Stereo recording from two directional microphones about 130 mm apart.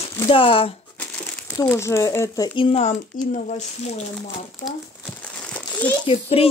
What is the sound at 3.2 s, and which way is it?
Speech, 90° left.